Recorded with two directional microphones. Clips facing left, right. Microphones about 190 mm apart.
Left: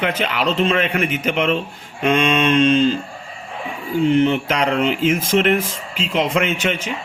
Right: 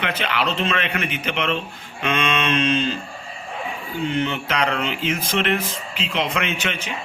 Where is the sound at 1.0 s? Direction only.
40° left (ahead or behind).